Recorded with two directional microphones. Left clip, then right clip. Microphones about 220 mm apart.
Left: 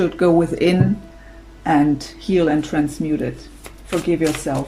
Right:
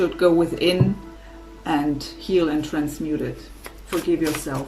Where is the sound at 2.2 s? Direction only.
25° left (ahead or behind).